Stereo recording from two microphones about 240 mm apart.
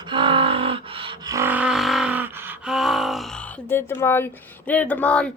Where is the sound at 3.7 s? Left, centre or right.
Centre.